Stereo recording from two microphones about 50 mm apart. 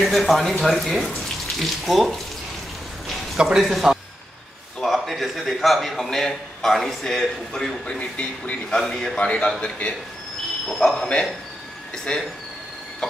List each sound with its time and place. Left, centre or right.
0.0 s a man's voice: centre
3.3 s a man's voice: centre
7.8 s a man's voice: left
10.7 s a man's voice: centre